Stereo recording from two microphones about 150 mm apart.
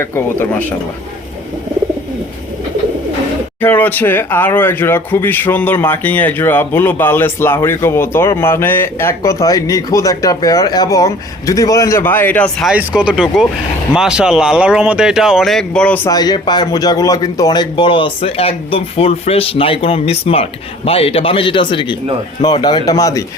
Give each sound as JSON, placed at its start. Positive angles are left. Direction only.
{"t": 0.0, "sound": "speech", "side_deg": 15}
{"t": 3.6, "sound": "speech", "side_deg": 15}
{"t": 12.6, "sound": "speech", "side_deg": -5}
{"t": 16.0, "sound": "a man's voice", "side_deg": 25}